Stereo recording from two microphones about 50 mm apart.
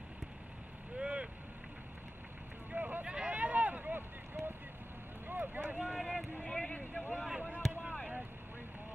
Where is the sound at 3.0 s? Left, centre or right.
Right.